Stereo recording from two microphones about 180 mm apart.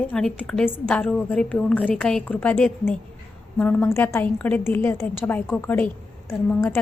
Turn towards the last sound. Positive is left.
turn(degrees=5)  # may be behind; listen again after turning